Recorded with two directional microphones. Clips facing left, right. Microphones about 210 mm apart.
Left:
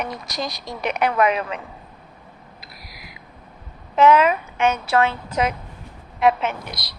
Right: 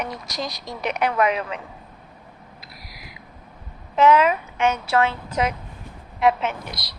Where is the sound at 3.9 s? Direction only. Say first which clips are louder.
Left 1 dB; 55° left (ahead or behind).